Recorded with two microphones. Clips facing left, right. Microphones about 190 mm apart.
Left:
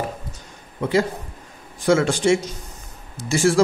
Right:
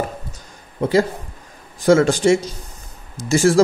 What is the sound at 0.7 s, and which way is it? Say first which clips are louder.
Speech: right 3 dB; 40° right (ahead or behind).